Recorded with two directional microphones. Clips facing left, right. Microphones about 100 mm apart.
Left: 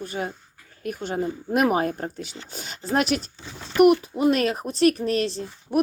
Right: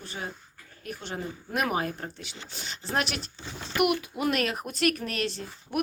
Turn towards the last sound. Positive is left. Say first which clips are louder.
# left 7 dB
turn(degrees=35)  # may be behind; listen again after turning